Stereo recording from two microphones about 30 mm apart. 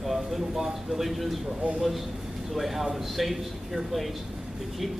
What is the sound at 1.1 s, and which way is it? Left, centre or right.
Speech, centre.